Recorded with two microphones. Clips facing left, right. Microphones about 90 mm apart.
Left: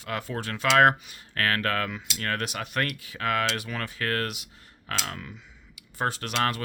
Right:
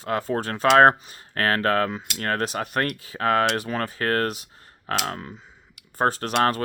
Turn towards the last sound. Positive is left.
turn(degrees=-40)  # may be behind; listen again after turning